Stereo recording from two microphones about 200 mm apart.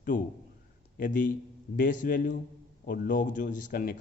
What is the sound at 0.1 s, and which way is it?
A man's voice, 40° left (ahead or behind).